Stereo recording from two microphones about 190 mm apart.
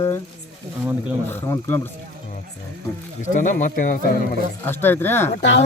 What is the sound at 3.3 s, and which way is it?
Speech, 40° left (ahead or behind).